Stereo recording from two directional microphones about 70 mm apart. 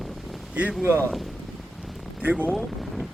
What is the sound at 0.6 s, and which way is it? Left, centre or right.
Speech, right.